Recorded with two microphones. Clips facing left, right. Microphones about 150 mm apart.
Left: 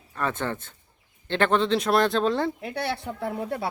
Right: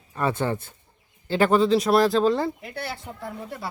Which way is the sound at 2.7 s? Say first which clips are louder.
Left 4 dB; 70° left (ahead or behind).